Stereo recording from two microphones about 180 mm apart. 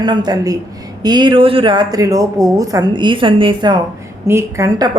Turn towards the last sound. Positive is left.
turn(degrees=-20)  # may be behind; listen again after turning